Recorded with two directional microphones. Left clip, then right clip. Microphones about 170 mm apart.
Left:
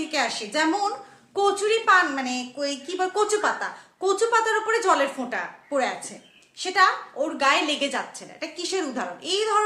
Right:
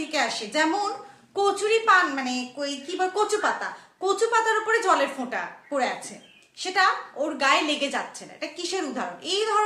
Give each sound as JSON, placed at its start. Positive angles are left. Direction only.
{"t": 0.1, "sound": "a woman's voice", "side_deg": 20}